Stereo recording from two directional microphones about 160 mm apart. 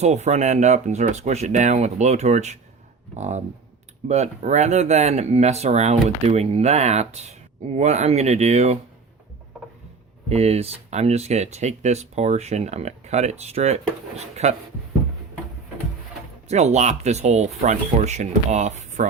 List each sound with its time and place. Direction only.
0.0 s speech: 45° right (ahead or behind)
10.2 s speech: 40° right (ahead or behind)
16.5 s speech: 45° right (ahead or behind)